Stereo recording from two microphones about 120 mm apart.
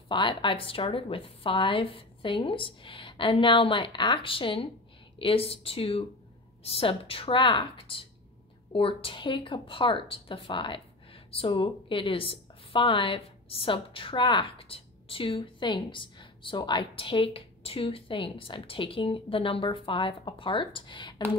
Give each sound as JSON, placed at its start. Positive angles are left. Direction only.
{"t": 0.1, "sound": "a woman's voice", "side_deg": 45}